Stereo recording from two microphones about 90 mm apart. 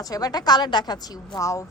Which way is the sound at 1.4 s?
35° left (ahead or behind).